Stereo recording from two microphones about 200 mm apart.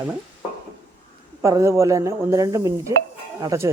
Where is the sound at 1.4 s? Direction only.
15° right (ahead or behind).